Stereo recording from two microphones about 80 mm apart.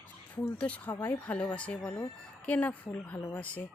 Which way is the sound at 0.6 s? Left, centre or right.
Centre.